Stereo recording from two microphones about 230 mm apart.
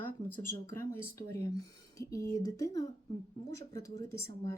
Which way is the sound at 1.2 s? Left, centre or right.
Left.